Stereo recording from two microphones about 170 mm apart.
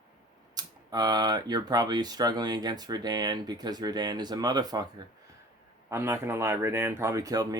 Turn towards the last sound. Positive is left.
turn(degrees=-20)  # may be behind; listen again after turning